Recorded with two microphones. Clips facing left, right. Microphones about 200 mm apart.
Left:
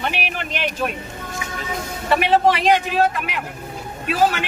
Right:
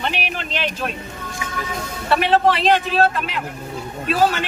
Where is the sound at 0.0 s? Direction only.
15° left (ahead or behind).